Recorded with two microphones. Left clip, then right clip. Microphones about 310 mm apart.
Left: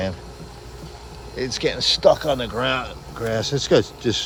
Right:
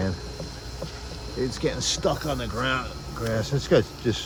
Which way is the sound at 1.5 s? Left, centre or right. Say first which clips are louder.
Left 9 dB; centre.